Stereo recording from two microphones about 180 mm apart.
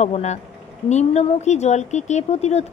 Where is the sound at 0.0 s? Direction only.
40° left (ahead or behind).